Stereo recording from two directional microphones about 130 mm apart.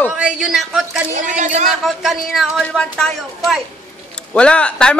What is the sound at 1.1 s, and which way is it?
Speech, 70° right (ahead or behind).